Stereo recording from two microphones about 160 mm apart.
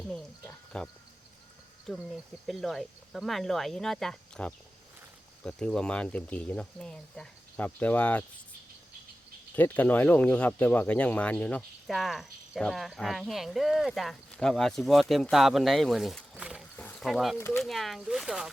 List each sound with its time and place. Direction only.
0.1 s frog: 5° left (ahead or behind)
2.0 s speech: centre (ahead or behind)
9.6 s speech: 10° left (ahead or behind)
16.7 s wild animals: 10° left (ahead or behind)
17.3 s speech: 15° left (ahead or behind)
17.6 s speech: centre (ahead or behind)